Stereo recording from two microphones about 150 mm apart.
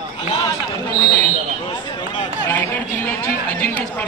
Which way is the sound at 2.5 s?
10° left (ahead or behind).